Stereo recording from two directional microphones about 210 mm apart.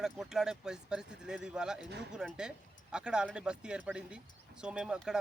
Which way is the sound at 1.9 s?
55° right (ahead or behind).